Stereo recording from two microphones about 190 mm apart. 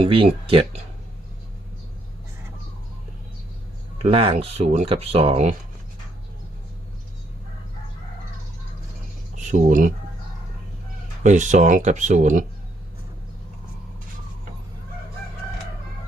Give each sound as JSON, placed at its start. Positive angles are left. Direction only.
{"t": 0.0, "sound": "speech", "side_deg": -30}
{"t": 3.9, "sound": "speech", "side_deg": -30}
{"t": 9.3, "sound": "speech", "side_deg": -40}
{"t": 11.2, "sound": "speech", "side_deg": -40}